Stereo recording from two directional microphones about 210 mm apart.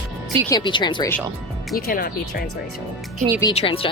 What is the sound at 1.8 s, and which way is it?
Speech, 45° left (ahead or behind).